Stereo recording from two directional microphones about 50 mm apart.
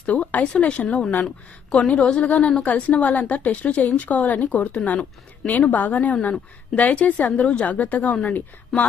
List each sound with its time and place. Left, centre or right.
0.0 s a sound: left
0.6 s a woman's voice: left
2.1 s a woman's voice: left